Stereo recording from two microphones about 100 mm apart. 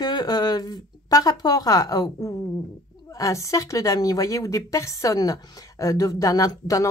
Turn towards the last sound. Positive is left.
turn(degrees=35)  # may be behind; listen again after turning